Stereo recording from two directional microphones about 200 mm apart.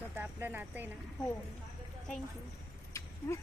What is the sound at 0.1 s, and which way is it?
Speech, 10° right (ahead or behind).